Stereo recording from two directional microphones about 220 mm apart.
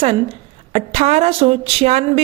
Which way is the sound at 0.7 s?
30° right (ahead or behind).